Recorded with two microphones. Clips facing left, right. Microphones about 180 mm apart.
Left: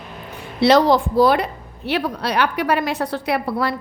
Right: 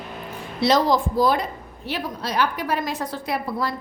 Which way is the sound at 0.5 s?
70° left (ahead or behind).